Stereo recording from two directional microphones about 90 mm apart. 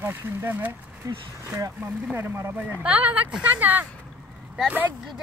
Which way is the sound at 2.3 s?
30° right (ahead or behind).